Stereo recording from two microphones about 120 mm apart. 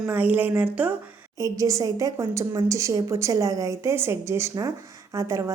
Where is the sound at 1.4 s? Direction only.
25° right (ahead or behind).